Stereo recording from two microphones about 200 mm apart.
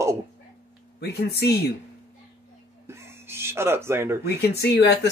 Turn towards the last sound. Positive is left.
turn(degrees=55)  # may be behind; listen again after turning